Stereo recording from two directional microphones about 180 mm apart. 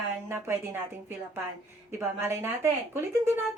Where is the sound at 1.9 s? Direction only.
15° right (ahead or behind).